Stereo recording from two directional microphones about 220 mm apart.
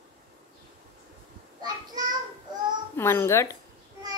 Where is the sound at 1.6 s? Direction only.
15° right (ahead or behind).